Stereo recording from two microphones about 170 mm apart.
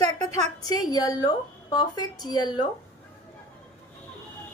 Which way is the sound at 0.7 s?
20° left (ahead or behind).